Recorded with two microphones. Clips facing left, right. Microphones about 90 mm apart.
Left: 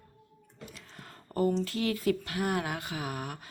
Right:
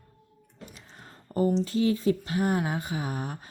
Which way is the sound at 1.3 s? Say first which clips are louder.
Right 3 dB; 15° right (ahead or behind).